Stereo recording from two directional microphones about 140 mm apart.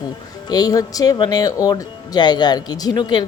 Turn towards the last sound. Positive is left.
turn(degrees=30)  # may be behind; listen again after turning